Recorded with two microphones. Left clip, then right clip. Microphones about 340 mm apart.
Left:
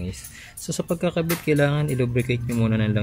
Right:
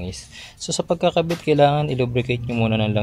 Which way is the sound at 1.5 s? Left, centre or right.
Centre.